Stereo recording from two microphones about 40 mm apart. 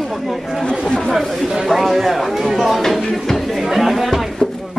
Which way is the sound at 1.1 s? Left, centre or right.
Centre.